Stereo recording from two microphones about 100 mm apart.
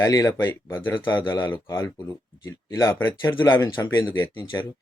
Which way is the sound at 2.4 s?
35° left (ahead or behind).